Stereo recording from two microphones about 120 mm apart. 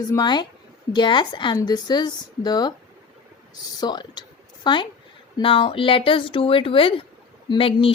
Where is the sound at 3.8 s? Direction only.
40° left (ahead or behind).